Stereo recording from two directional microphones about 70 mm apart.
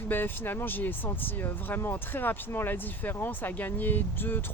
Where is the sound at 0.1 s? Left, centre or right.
Left.